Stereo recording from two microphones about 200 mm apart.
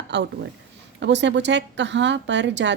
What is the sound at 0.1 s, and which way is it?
Speech, 60° right (ahead or behind).